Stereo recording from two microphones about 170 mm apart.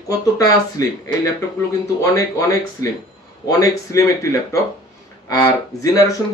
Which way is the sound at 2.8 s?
20° left (ahead or behind).